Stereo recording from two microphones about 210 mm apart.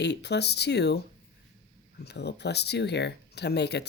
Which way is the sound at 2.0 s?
50° left (ahead or behind).